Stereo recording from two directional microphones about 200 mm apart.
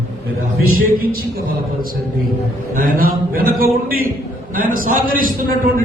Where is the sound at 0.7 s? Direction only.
45° right (ahead or behind).